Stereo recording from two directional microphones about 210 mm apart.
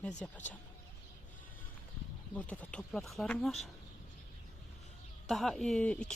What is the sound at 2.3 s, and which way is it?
Speech, 5° left (ahead or behind).